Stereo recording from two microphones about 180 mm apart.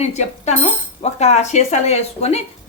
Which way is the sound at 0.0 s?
40° left (ahead or behind).